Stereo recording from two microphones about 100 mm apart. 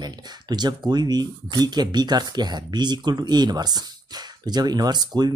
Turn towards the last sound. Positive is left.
turn(degrees=-45)  # may be behind; listen again after turning